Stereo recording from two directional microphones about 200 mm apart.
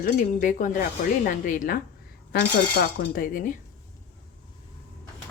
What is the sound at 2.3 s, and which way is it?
Speech, 55° left (ahead or behind).